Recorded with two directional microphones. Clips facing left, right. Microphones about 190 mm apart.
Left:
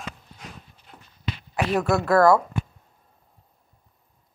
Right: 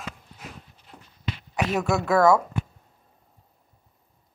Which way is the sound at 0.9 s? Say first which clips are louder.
Right 2 dB; 25° right (ahead or behind).